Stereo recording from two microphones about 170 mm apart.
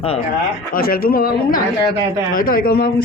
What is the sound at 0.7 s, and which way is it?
Speech, 60° left (ahead or behind).